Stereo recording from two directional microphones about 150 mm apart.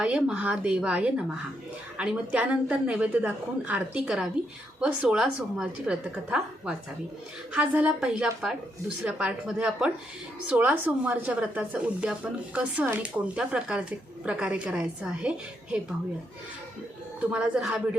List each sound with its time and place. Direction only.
0.0 s a woman's voice: 10° right (ahead or behind)
17.3 s a woman's voice: 5° right (ahead or behind)